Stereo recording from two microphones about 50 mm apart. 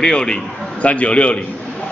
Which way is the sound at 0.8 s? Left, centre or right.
Left.